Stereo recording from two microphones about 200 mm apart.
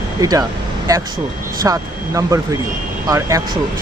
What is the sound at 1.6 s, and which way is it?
Speech, 15° right (ahead or behind).